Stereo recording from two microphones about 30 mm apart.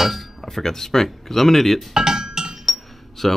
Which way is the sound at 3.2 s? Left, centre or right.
Centre.